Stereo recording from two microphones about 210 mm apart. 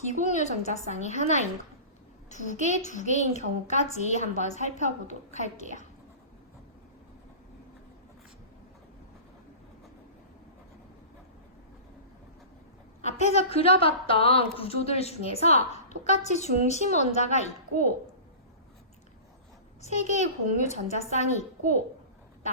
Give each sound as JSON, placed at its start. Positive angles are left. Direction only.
{"t": 0.0, "sound": "a woman's voice", "side_deg": 35}
{"t": 13.1, "sound": "a woman's voice", "side_deg": 30}
{"t": 19.8, "sound": "a woman's voice", "side_deg": 35}